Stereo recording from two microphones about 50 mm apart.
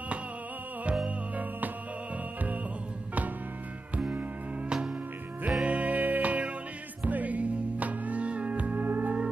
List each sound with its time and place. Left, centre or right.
1.0 s music: right
5.6 s music: right